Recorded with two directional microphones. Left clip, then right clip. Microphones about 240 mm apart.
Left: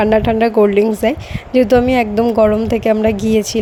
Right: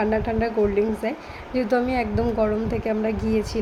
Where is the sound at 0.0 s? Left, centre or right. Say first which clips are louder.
Left 10 dB; left.